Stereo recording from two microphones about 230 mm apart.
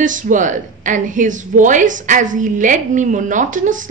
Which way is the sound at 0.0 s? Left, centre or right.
Right.